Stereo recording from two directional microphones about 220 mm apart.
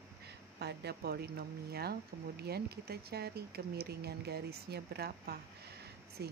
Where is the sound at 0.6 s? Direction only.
50° right (ahead or behind).